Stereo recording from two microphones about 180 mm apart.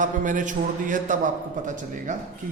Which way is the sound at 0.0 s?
45° right (ahead or behind).